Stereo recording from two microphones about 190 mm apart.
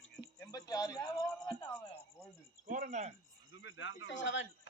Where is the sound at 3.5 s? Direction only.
80° left.